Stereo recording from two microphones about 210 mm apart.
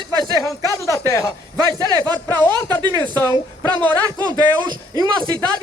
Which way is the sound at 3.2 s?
15° left (ahead or behind).